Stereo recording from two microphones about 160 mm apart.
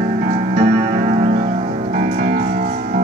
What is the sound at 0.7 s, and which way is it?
Music, 45° right (ahead or behind).